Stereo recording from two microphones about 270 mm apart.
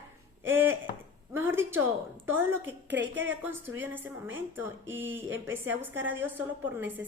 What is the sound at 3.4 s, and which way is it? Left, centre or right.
Speech, centre.